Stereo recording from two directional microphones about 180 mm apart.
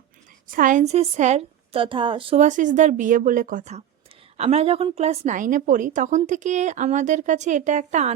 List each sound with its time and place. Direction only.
0.4 s speech: 50° right (ahead or behind); by 2.4 s 30° right (ahead or behind)
2.4 s a woman's voice: 45° right (ahead or behind)